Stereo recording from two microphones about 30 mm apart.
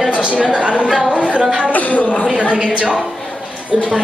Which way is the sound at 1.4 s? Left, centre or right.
Right.